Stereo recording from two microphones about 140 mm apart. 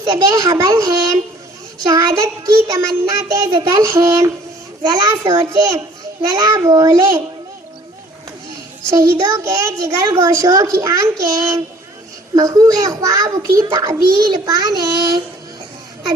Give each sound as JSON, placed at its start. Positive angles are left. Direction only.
{"t": 0.0, "sound": "a child's voice", "side_deg": -25}
{"t": 8.9, "sound": "a child's voice", "side_deg": -20}